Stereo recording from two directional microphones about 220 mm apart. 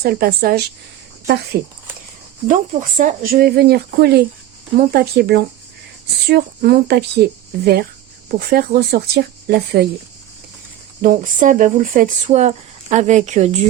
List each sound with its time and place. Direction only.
0.0 s speech: 45° right (ahead or behind)
3.0 s speech: 35° right (ahead or behind)
11.0 s speech: 35° right (ahead or behind)